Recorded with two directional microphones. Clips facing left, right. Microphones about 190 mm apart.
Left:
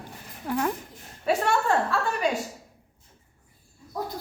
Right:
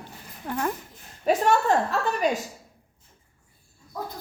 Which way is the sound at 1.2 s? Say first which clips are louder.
Right 3 dB; 40° right (ahead or behind).